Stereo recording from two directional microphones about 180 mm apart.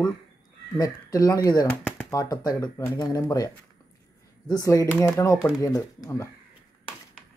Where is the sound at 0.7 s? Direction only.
20° left (ahead or behind).